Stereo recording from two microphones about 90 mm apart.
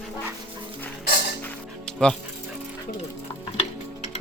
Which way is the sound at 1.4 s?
10° left (ahead or behind).